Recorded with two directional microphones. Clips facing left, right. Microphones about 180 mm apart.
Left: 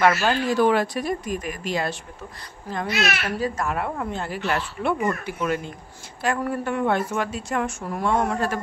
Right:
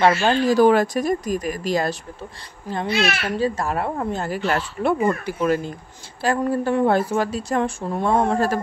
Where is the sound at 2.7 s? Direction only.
30° right (ahead or behind).